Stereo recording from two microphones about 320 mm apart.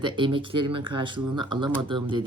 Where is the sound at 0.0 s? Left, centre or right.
Centre.